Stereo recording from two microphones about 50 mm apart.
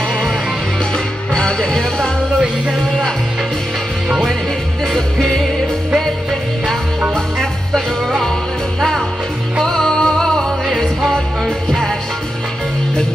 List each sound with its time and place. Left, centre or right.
0.9 s music: centre
4.9 s music: centre
7.3 s music: centre
9.6 s music: centre